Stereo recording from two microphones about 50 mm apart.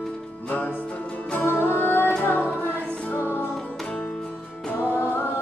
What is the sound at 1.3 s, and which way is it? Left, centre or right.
Music, left.